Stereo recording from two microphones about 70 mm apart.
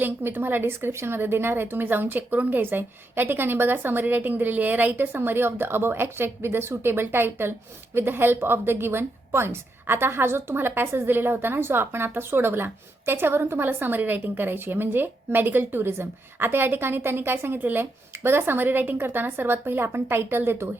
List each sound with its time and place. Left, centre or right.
0.0 s a woman's voice: right